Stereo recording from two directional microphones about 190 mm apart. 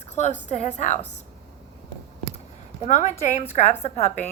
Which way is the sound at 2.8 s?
40° left (ahead or behind).